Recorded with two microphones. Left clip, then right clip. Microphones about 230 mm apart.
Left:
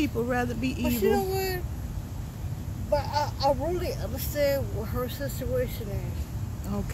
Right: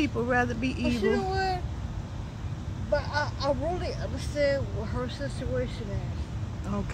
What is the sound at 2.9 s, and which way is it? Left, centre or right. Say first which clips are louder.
Speech: left 1 dB; left.